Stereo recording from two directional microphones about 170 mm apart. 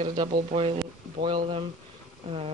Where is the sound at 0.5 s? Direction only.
35° right (ahead or behind).